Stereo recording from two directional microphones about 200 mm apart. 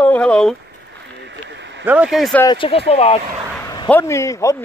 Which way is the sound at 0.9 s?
60° right (ahead or behind).